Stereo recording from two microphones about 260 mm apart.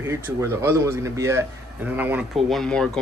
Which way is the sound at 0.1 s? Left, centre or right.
Centre.